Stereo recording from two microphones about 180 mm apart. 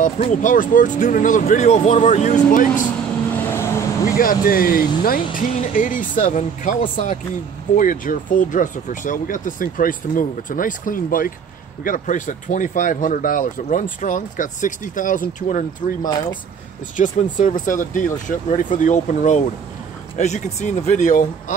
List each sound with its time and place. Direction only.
0.0 s speech: 45° left (ahead or behind)
3.3 s vehicle: 15° left (ahead or behind)
4.2 s speech: 50° left (ahead or behind)
16.0 s speech: 20° left (ahead or behind)
16.9 s speech: 45° left (ahead or behind)